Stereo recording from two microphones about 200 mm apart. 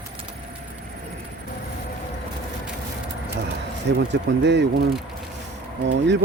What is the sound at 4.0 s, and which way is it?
Speech, 60° right (ahead or behind).